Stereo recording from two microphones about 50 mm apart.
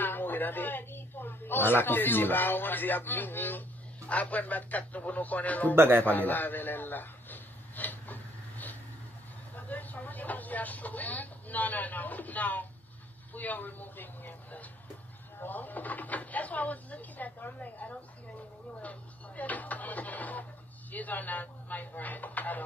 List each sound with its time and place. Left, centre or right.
0.0 s a woman's voice: left
4.1 s speech: left
5.8 s speech: right
6.0 s a sound: left
9.6 s speech: left
18.8 s a sound: left
20.9 s speech: left